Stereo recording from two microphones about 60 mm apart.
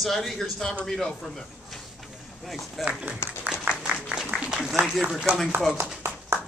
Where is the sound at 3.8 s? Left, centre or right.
Centre.